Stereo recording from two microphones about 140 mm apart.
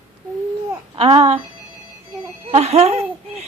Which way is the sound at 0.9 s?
45° right (ahead or behind).